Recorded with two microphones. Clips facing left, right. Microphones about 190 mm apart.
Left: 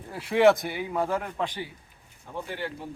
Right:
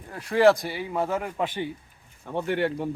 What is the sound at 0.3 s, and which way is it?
Speech, centre (ahead or behind).